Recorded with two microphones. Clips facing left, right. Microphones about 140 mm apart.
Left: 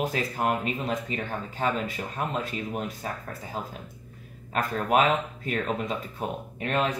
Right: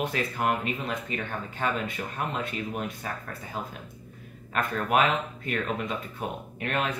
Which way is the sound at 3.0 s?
40° left (ahead or behind).